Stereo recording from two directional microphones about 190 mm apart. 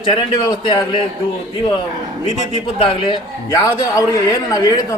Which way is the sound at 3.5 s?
15° left (ahead or behind).